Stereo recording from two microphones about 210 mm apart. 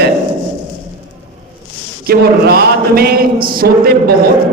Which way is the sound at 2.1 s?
50° right (ahead or behind).